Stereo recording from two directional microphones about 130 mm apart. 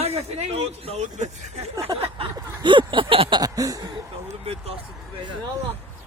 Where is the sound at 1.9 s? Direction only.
30° right (ahead or behind).